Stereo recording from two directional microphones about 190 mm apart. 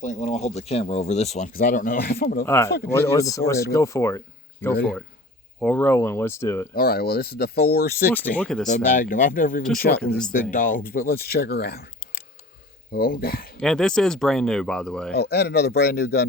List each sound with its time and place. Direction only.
0.0 s speech: 40° left (ahead or behind)
1.5 s speech: 50° left (ahead or behind)
2.4 s speech: 15° left (ahead or behind)
6.7 s speech: 55° left (ahead or behind)
8.1 s speech: 10° left (ahead or behind)
8.6 s speech: 40° left (ahead or behind)
13.6 s speech: 5° left (ahead or behind)
15.1 s speech: 60° left (ahead or behind)